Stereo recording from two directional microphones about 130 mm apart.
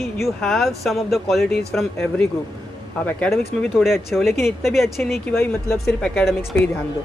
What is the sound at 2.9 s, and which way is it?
Speech, 10° left (ahead or behind).